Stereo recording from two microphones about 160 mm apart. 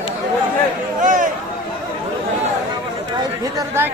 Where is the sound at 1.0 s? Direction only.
55° right (ahead or behind).